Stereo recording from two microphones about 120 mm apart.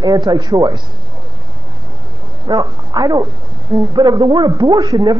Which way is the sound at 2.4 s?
35° right (ahead or behind).